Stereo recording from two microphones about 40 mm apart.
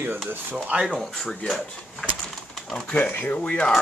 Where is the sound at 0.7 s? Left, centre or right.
Right.